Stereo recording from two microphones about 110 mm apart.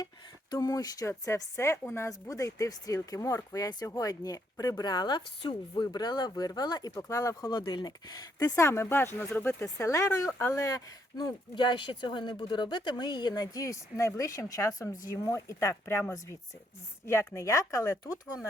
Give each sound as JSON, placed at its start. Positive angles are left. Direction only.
{"t": 0.5, "sound": "a woman's voice", "side_deg": 35}
{"t": 7.6, "sound": "a woman's voice", "side_deg": 45}
{"t": 8.5, "sound": "speech", "side_deg": 25}
{"t": 11.5, "sound": "a woman's voice", "side_deg": 45}